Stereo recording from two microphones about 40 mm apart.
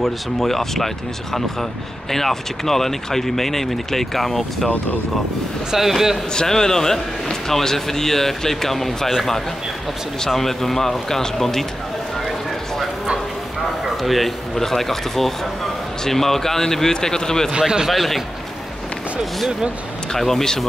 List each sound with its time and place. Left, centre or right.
0.0 s speech: centre
5.7 s a man's voice: centre
6.3 s speech: centre
10.3 s speech: centre
13.8 s speech: centre
17.5 s speech: centre
17.8 s speech: centre
20.1 s speech: centre